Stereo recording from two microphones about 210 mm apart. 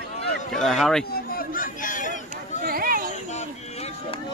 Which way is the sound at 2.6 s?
45° right (ahead or behind).